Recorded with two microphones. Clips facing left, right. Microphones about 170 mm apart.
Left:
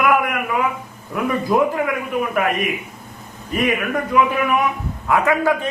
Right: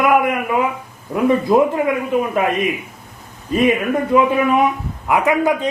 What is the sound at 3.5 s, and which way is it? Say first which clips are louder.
A man's voice: right 4 dB; 25° right (ahead or behind).